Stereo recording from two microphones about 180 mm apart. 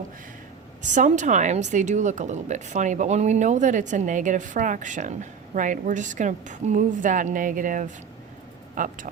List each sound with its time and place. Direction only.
0.8 s a woman's voice: 45° right (ahead or behind)